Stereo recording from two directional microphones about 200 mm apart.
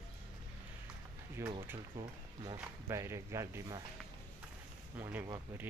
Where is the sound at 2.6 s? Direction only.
15° right (ahead or behind).